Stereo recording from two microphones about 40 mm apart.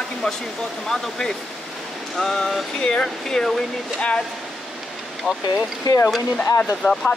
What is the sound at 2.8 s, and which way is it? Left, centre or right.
Speech, left.